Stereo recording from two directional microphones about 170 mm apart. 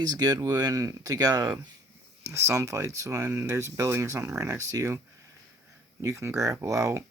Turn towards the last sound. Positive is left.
turn(degrees=-20)  # may be behind; listen again after turning